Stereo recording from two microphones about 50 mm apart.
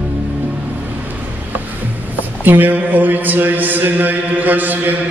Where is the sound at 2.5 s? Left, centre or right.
Right.